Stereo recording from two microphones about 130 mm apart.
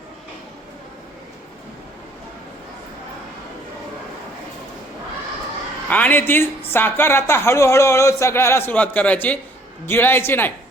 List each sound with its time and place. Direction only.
5.9 s speech: 15° left (ahead or behind)